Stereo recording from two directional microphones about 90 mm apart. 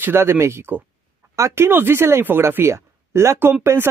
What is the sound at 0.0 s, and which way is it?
Speech, 25° right (ahead or behind).